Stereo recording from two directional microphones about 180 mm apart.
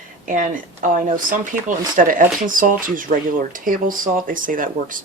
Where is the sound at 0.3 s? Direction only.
45° right (ahead or behind).